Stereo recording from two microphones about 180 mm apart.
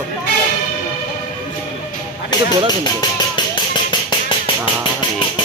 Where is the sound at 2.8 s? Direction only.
25° left (ahead or behind).